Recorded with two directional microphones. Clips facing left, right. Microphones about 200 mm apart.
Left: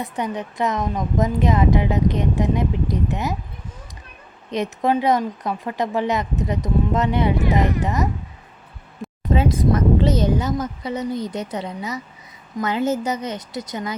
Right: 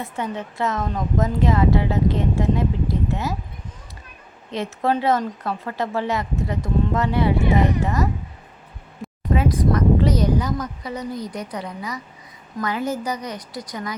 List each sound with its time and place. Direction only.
0.0 s speech: 15° left (ahead or behind)
4.5 s speech: 15° left (ahead or behind)
9.3 s speech: 25° left (ahead or behind)